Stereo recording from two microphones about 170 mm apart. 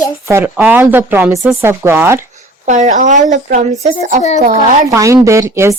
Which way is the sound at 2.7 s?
45° right (ahead or behind).